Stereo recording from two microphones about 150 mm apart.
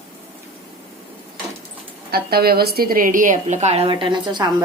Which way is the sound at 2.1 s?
90° right.